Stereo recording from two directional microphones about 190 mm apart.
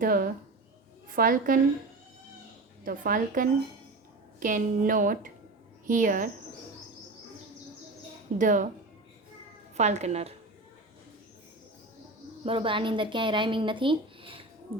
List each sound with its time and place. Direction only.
0.0 s a woman's voice: 50° right (ahead or behind)
2.8 s a woman's voice: 45° right (ahead or behind)
8.4 s a woman's voice: 45° right (ahead or behind)
9.7 s a woman's voice: 35° right (ahead or behind)
12.5 s speech: 25° right (ahead or behind)
14.7 s finger snapping: 30° right (ahead or behind)